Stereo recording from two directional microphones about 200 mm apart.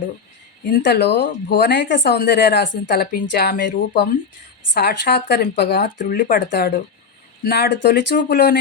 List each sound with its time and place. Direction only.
0.8 s speech: 55° left (ahead or behind)